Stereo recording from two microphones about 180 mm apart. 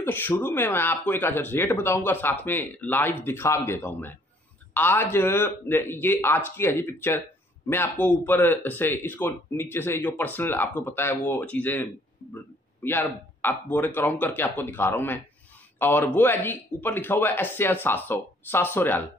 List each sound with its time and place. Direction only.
0.0 s speech: 10° left (ahead or behind)